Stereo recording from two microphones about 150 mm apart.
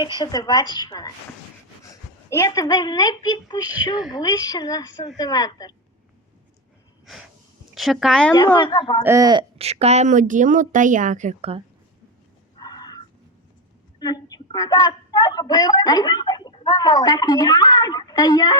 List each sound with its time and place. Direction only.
0.0 s a woman's voice: 30° left (ahead or behind)
7.0 s snort: centre (ahead or behind)
7.8 s speech: centre (ahead or behind)
8.5 s a woman's voice: 30° left (ahead or behind)
9.0 s speech: 25° right (ahead or behind)
9.6 s speech: 45° right (ahead or behind)
12.6 s a sound: 25° left (ahead or behind)
14.0 s a woman's voice: 25° left (ahead or behind)